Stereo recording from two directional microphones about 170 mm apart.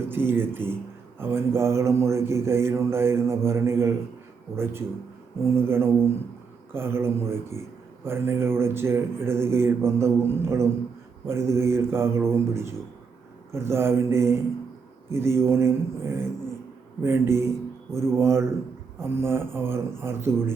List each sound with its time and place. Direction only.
0.1 s speech: 15° right (ahead or behind)